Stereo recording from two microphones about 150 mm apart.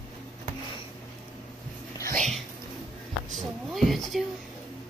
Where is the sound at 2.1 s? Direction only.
5° left (ahead or behind).